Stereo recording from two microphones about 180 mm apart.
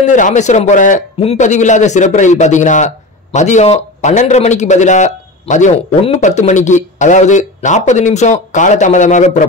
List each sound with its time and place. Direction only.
0.0 s a man's voice: 45° left (ahead or behind)